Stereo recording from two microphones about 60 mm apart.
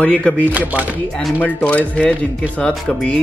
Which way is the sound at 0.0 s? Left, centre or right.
Left.